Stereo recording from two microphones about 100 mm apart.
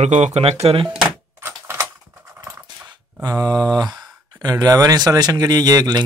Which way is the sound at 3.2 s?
40° right (ahead or behind).